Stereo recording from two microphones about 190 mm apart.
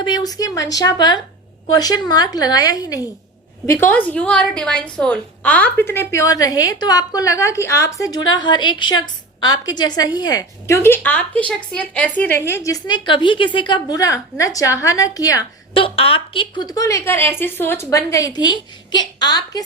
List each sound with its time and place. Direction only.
0.0 s a woman's voice: 20° left (ahead or behind)